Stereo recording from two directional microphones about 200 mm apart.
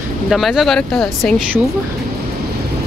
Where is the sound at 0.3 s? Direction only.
Centre (ahead or behind).